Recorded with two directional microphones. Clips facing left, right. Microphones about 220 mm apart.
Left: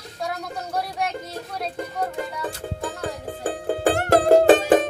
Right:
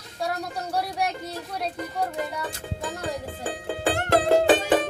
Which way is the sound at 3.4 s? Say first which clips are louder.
Left 6 dB; 45° left (ahead or behind).